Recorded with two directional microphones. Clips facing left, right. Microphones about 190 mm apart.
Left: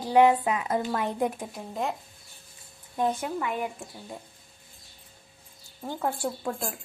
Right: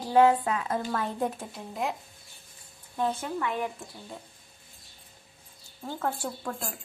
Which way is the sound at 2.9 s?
15° left (ahead or behind).